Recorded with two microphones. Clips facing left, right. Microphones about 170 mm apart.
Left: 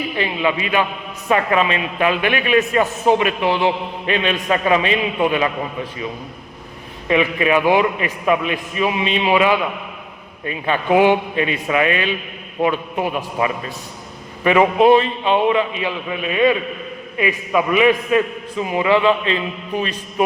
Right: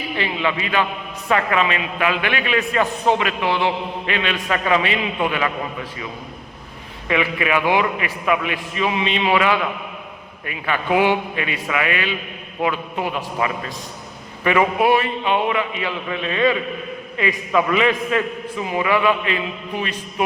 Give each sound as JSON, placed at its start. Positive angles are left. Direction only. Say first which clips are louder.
{"t": 0.2, "sound": "a man's voice", "louder": "left 2 dB", "side_deg": 20}
{"t": 7.1, "sound": "a man's voice", "louder": "left 4 dB", "side_deg": 25}